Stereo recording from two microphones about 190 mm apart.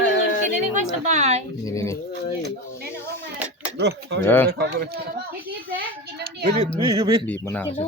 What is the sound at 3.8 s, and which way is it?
Speech, 65° right (ahead or behind).